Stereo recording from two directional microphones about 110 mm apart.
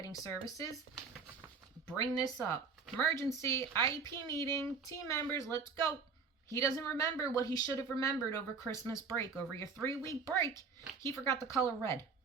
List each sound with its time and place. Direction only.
0.0 s speech: 30° left (ahead or behind)
2.1 s a woman's voice: 30° left (ahead or behind)